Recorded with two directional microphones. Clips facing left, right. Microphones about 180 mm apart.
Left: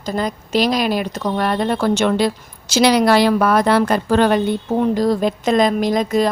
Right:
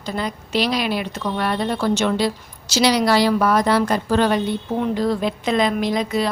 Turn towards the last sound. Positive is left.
turn(degrees=45)  # may be behind; listen again after turning